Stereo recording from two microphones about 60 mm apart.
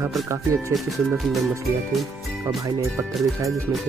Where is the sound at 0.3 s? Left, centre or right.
Right.